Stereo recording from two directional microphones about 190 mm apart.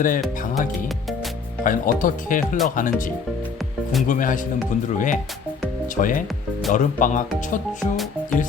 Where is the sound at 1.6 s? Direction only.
45° left (ahead or behind).